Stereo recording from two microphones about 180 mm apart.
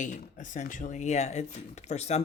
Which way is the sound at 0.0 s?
45° left (ahead or behind).